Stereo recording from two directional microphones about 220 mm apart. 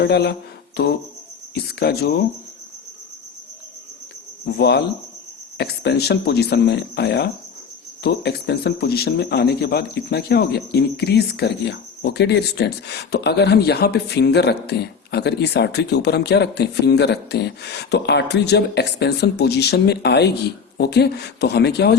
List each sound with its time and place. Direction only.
0.0 s speech: 50° left (ahead or behind)
1.5 s speech: 45° left (ahead or behind)
4.4 s speech: 50° left (ahead or behind)